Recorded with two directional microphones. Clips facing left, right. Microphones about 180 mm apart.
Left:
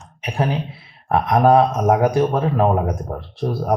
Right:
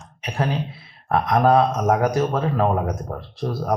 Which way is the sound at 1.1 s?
25° left (ahead or behind).